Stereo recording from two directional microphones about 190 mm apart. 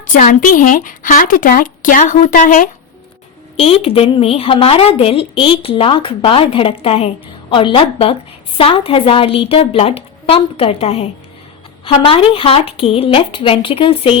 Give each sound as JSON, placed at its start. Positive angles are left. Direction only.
{"t": 0.1, "sound": "speech", "side_deg": 45}
{"t": 3.6, "sound": "a woman's voice", "side_deg": 30}